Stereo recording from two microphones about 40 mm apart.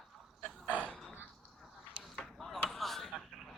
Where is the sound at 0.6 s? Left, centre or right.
Right.